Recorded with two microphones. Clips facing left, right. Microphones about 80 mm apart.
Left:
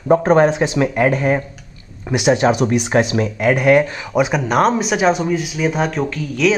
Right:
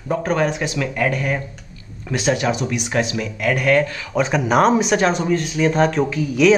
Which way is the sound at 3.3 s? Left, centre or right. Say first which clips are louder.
Left 4 dB; left.